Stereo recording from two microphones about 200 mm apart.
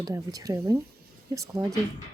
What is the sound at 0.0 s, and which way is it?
Speech, 20° right (ahead or behind).